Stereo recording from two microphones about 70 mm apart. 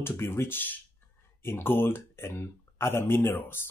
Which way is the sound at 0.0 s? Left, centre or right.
Left.